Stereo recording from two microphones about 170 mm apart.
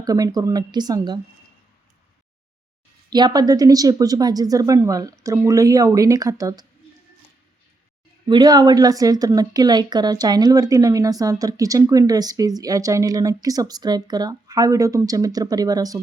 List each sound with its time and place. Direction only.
0.0 s speech: 20° right (ahead or behind)
3.1 s speech: 25° right (ahead or behind)
8.3 s speech: 25° right (ahead or behind)